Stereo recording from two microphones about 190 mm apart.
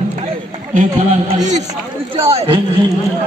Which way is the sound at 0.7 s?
40° right (ahead or behind).